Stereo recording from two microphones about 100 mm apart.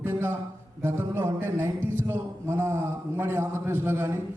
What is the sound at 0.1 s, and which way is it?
A man's voice, 25° right (ahead or behind).